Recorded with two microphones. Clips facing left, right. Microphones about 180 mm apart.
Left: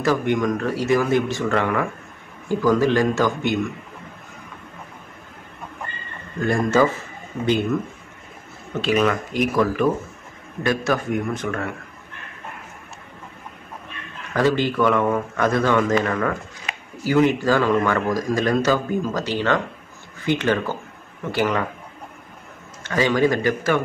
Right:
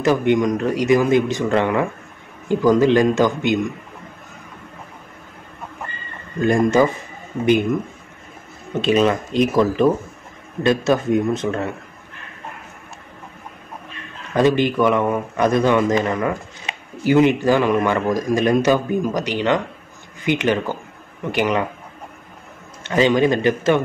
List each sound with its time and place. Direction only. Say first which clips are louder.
0.0 s speech: right 4 dB; 20° right (ahead or behind)
6.4 s a man's voice: right 3 dB; 20° right (ahead or behind)
8.7 s speech: right 3 dB; 20° right (ahead or behind)
14.3 s a man's voice: right 3 dB; 20° right (ahead or behind)
22.8 s speech: right 3 dB; 20° right (ahead or behind)